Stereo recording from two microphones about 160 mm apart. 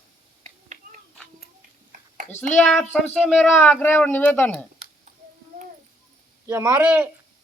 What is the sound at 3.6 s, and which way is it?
Speech, 10° left (ahead or behind).